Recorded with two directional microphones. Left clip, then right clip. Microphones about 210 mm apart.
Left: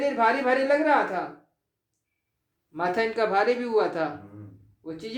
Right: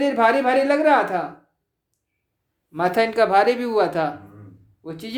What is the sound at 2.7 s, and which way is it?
Speech, 55° right (ahead or behind).